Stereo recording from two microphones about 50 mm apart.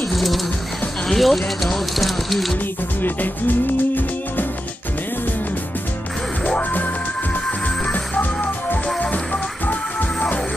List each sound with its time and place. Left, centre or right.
0.1 s a sound: centre
1.0 s speech: centre
3.0 s music: left
7.9 s music: left